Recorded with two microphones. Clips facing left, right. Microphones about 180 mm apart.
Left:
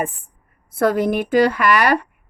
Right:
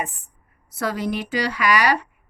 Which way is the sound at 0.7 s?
55° left (ahead or behind).